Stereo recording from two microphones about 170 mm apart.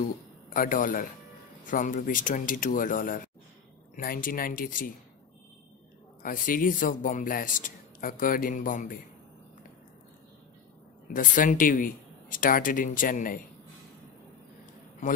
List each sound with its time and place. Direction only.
0.5 s speech: 55° left (ahead or behind)
6.2 s speech: 55° left (ahead or behind)
11.1 s speech: 50° left (ahead or behind)